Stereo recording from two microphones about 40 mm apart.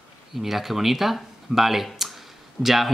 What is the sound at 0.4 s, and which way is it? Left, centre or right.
Speech, centre.